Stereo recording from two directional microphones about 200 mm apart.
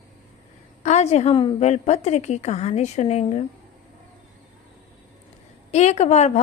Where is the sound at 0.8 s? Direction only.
35° left (ahead or behind).